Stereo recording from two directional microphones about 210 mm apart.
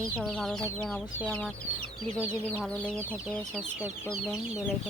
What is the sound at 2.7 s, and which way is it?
Speech, 5° left (ahead or behind).